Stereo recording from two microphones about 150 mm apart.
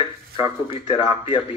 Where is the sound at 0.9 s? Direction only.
35° left (ahead or behind).